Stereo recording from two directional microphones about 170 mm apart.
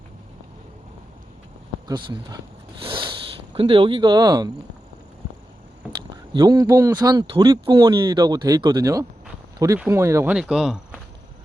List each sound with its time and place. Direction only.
1.9 s speech: 25° right (ahead or behind)
6.3 s speech: 25° right (ahead or behind)
10.3 s speech: 5° right (ahead or behind)